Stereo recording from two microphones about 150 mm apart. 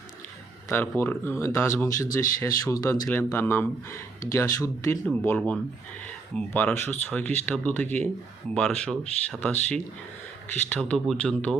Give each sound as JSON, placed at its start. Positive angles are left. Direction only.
{"t": 0.7, "sound": "speech", "side_deg": 15}